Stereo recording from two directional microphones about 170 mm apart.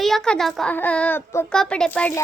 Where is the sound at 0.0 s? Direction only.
Centre (ahead or behind).